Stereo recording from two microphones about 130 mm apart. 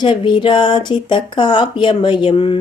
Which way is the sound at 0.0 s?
40° left (ahead or behind).